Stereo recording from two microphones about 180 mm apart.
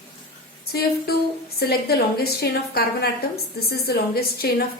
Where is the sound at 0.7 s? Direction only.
60° left (ahead or behind).